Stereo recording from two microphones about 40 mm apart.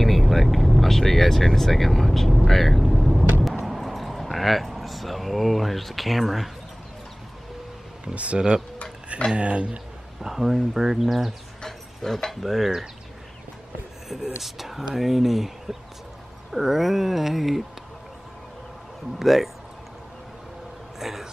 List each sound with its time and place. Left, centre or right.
0.0 s speech: centre
3.6 s a sound: centre
8.1 s speech: right
10.2 s speech: centre
11.6 s speech: centre
14.0 s speech: centre
16.5 s speech: centre
19.1 s speech: centre
21.0 s speech: centre